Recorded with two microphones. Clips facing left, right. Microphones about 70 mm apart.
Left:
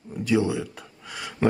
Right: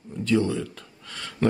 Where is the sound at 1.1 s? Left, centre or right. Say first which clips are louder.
Left 1 dB; centre.